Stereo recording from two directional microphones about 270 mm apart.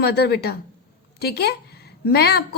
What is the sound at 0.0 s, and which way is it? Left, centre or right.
A woman's voice, left.